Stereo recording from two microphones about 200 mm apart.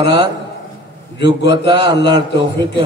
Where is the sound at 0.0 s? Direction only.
55° left (ahead or behind).